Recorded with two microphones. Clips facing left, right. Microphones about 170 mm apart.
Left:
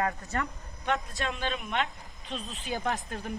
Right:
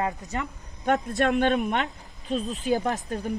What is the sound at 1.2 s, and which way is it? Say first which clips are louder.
Speech: right 11 dB; 60° right (ahead or behind).